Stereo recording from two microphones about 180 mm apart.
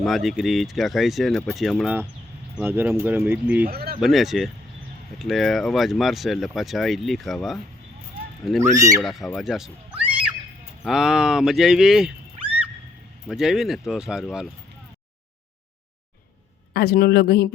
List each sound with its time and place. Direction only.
0.0 s speech: centre (ahead or behind)
3.7 s speech: 60° right (ahead or behind)
4.0 s speech: centre (ahead or behind)
8.7 s speech: 20° right (ahead or behind)
9.0 s speech: centre (ahead or behind)
13.2 s speech: centre (ahead or behind)
16.7 s speech: 55° left (ahead or behind)